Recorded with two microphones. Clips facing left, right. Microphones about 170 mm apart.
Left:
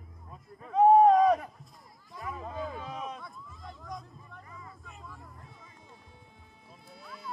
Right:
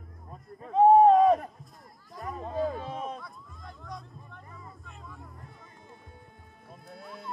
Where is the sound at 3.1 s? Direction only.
Centre (ahead or behind).